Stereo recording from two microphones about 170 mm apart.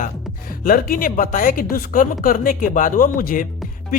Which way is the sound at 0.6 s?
60° left (ahead or behind).